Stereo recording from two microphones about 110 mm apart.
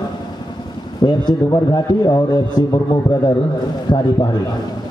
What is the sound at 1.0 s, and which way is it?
A man's voice, 40° left (ahead or behind).